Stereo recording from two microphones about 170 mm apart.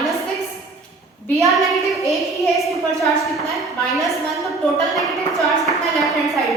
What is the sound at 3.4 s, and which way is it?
A woman's voice, centre (ahead or behind).